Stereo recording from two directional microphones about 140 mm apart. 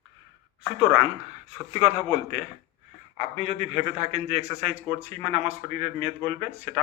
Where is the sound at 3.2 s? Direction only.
50° right (ahead or behind).